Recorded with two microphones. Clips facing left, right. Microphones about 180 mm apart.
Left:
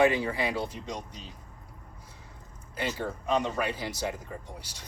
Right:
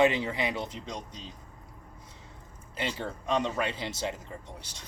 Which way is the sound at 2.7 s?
25° right (ahead or behind).